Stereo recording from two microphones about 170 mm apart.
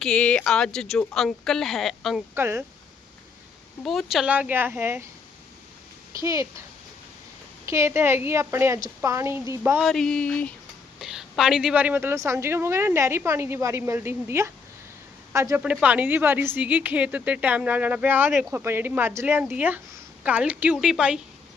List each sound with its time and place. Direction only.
0.0 s speech: 5° left (ahead or behind)
2.3 s a woman's voice: 15° right (ahead or behind)
3.8 s a woman's voice: centre (ahead or behind)
6.2 s a child's voice: 20° right (ahead or behind)
7.7 s a woman's voice: 15° right (ahead or behind)
9.8 s a woman's voice: centre (ahead or behind)